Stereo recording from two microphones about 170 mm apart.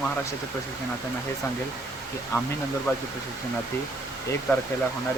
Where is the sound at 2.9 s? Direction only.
15° left (ahead or behind).